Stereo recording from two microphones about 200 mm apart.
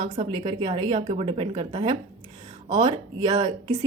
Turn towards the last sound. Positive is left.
turn(degrees=-20)  # may be behind; listen again after turning